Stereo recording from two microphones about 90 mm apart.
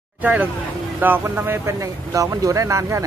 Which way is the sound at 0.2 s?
20° right (ahead or behind).